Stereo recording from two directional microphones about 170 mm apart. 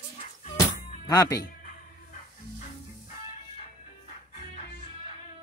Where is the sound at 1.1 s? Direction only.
20° left (ahead or behind).